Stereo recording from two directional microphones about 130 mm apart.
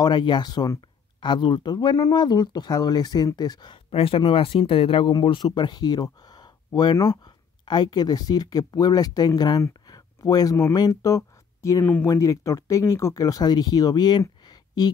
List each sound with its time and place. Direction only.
0.0 s speech: 35° left (ahead or behind)
11.8 s speech: 10° left (ahead or behind)
12.1 s speech: 25° left (ahead or behind)